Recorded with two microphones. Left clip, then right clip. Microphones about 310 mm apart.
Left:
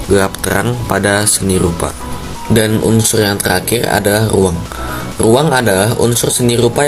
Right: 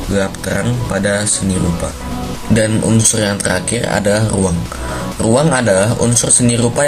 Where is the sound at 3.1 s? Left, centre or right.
Left.